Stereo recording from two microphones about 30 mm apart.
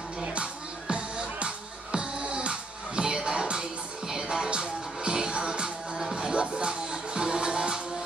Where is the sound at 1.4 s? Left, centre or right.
Right.